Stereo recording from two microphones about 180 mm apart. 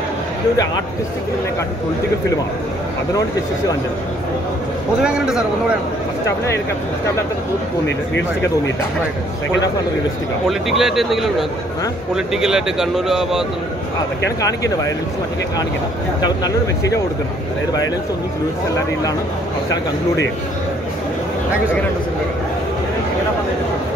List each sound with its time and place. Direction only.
5.0 s speech: 5° right (ahead or behind)
8.1 s speech: 90° left
10.7 s speech: centre (ahead or behind)
16.2 s speech: 20° left (ahead or behind)